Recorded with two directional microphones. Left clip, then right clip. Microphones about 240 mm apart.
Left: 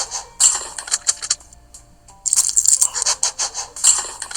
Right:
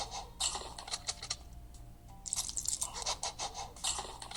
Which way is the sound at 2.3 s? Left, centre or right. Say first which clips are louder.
Left 19 dB; left.